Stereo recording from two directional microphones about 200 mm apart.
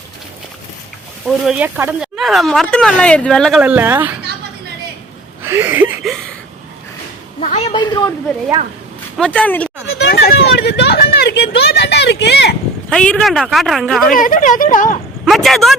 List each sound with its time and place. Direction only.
1.5 s speech: 5° right (ahead or behind)
5.5 s a sound: 10° right (ahead or behind)
7.4 s a man's voice: 30° left (ahead or behind)
9.1 s speech: 5° left (ahead or behind)
9.9 s a sound: 55° left (ahead or behind)
12.9 s speech: 5° left (ahead or behind)
14.1 s speech: 40° left (ahead or behind)
15.2 s speech: centre (ahead or behind)